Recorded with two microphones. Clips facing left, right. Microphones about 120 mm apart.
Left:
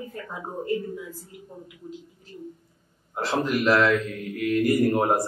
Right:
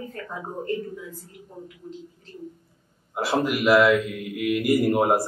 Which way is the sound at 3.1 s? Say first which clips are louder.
Right 1 dB; 10° right (ahead or behind).